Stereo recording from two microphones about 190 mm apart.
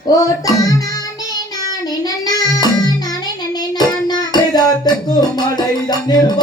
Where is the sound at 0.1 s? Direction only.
20° left (ahead or behind).